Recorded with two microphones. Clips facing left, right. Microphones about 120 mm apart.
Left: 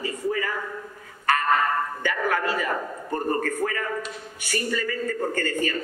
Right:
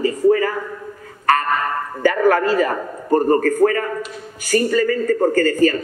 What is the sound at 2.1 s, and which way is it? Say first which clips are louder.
A man's voice: right 9 dB; 40° right (ahead or behind).